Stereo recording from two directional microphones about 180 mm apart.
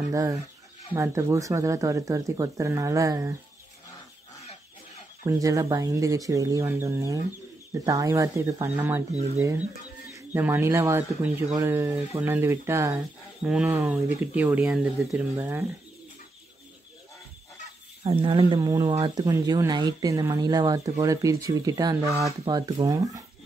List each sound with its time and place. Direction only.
0.1 s speech: 20° right (ahead or behind)
5.2 s speech: 20° right (ahead or behind)
10.1 s speech: 10° right (ahead or behind)
15.3 s speech: 15° right (ahead or behind)
18.0 s speech: 30° right (ahead or behind)